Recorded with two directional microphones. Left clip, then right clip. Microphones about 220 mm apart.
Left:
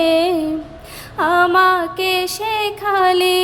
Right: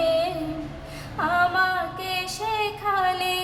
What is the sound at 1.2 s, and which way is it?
Female singing, 45° left (ahead or behind).